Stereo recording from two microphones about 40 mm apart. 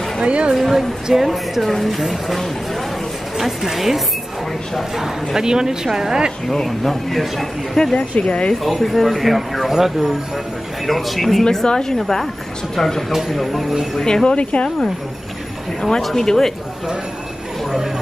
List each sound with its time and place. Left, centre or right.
0.2 s a woman's voice: right
0.6 s speech: centre
1.3 s speech: centre
6.5 s speech: centre
7.9 s speech: left
8.6 s speech: centre
11.6 s a woman's voice: centre
13.9 s a woman's voice: centre
14.3 s speech: left
16.0 s a woman's voice: centre